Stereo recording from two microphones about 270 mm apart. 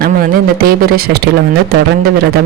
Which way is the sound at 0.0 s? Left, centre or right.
Right.